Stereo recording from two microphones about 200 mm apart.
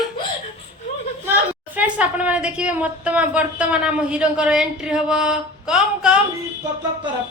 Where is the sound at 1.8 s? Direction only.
5° right (ahead or behind).